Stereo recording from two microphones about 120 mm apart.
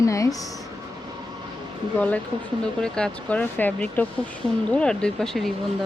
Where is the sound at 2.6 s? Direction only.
5° left (ahead or behind).